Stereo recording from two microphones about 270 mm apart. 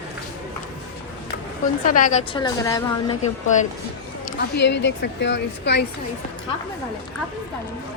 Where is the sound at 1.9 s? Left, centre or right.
Left.